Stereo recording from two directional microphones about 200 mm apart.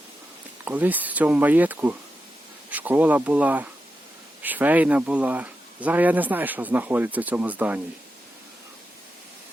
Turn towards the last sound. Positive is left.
turn(degrees=-10)  # may be behind; listen again after turning